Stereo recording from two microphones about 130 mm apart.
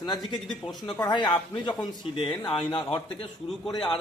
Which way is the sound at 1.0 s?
35° left (ahead or behind).